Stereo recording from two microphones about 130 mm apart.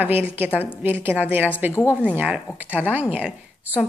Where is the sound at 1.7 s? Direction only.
15° left (ahead or behind).